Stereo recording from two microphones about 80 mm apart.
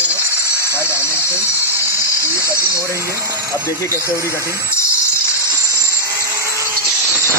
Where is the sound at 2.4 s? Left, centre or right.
Left.